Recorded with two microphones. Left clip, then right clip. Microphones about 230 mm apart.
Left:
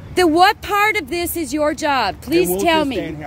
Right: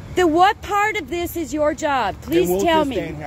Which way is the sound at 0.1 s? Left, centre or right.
Left.